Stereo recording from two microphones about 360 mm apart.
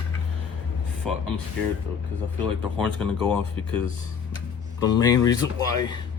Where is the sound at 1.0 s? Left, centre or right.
Centre.